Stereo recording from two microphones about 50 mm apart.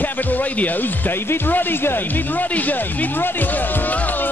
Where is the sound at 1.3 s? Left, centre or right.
Left.